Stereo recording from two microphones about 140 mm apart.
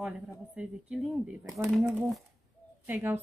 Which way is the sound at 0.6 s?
10° right (ahead or behind).